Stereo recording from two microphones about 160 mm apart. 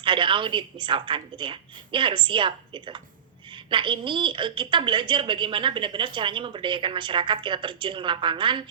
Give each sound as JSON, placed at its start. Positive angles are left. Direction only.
{"t": 0.0, "sound": "a woman's voice", "side_deg": -30}